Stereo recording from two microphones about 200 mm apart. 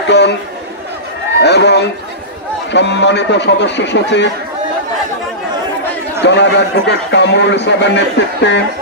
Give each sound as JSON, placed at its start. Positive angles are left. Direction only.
{"t": 1.4, "sound": "a man's voice", "side_deg": 55}
{"t": 6.2, "sound": "a man's voice", "side_deg": 60}